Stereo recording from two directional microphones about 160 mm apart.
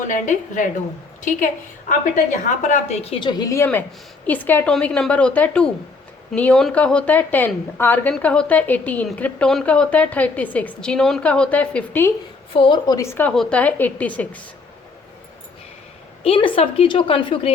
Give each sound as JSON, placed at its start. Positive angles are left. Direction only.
{"t": 0.1, "sound": "a woman's voice", "side_deg": 50}
{"t": 1.9, "sound": "a woman's voice", "side_deg": 50}
{"t": 12.5, "sound": "a woman's voice", "side_deg": 30}
{"t": 16.2, "sound": "a woman's voice", "side_deg": 35}